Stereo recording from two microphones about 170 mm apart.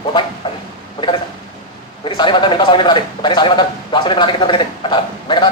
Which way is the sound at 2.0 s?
30° left (ahead or behind).